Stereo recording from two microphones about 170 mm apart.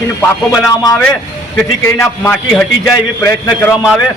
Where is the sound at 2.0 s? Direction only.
15° left (ahead or behind).